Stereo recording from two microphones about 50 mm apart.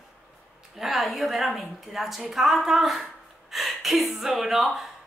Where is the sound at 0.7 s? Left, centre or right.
Centre.